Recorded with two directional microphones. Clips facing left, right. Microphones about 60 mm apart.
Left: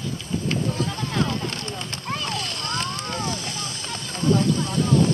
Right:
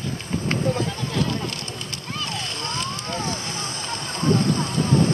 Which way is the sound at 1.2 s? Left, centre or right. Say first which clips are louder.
Even; left.